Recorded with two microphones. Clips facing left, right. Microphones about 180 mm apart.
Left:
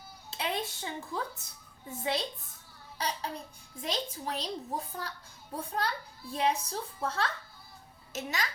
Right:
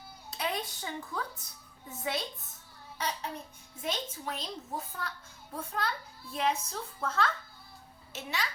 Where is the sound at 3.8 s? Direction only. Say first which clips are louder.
Left 1 dB; 35° left (ahead or behind).